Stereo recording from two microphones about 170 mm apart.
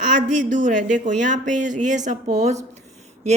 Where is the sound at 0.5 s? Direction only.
50° right (ahead or behind).